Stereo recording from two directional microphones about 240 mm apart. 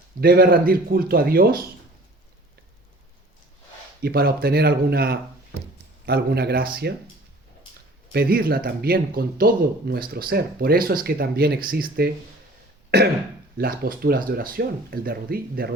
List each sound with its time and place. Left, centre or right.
0.2 s speech: right
4.0 s speech: right
8.1 s speech: right